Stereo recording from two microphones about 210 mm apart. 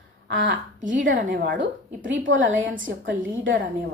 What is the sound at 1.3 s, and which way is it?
Speech, 55° right (ahead or behind).